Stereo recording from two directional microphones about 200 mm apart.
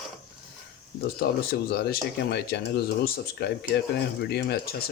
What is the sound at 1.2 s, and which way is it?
Speech, 50° left (ahead or behind).